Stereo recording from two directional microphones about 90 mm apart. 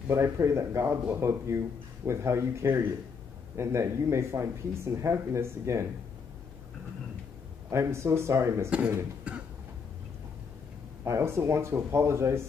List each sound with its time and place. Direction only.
0.1 s speech: 30° right (ahead or behind)
7.7 s speech: 30° right (ahead or behind)
8.6 s speech: 15° right (ahead or behind)
11.1 s speech: 30° right (ahead or behind)